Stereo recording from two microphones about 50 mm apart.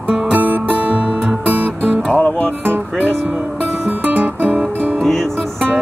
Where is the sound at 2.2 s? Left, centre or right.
Left.